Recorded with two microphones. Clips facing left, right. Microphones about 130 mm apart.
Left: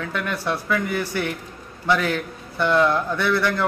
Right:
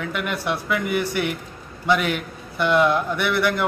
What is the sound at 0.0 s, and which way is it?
A man's voice, 15° right (ahead or behind).